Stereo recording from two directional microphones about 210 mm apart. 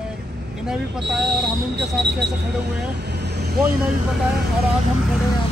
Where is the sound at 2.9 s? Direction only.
55° right (ahead or behind).